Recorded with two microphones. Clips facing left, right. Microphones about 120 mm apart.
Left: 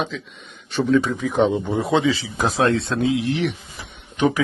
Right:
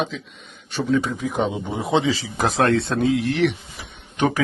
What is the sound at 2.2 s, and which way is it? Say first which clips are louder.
Speech: even; 60° right (ahead or behind).